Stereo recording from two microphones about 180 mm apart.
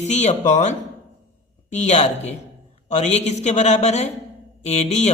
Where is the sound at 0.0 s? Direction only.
40° left (ahead or behind).